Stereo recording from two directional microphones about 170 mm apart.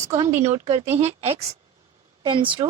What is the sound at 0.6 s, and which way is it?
A woman's voice, 40° right (ahead or behind).